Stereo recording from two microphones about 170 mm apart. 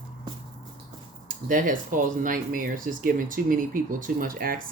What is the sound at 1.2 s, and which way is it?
Speech, 55° right (ahead or behind).